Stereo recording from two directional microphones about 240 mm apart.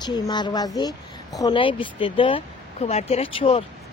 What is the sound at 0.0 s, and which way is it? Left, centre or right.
Speech, centre.